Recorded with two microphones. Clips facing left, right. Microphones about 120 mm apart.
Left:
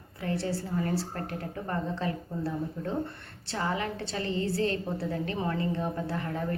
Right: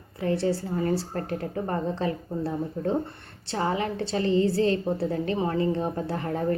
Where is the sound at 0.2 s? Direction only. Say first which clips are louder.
Right 6 dB; 25° right (ahead or behind).